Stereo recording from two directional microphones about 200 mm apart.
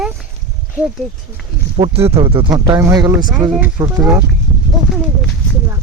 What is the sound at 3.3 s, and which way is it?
Speech, 5° right (ahead or behind).